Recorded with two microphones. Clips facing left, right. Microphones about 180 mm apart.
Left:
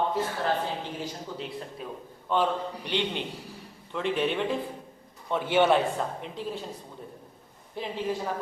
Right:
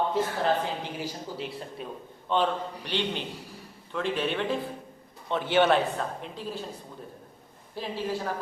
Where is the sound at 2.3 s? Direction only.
10° left (ahead or behind).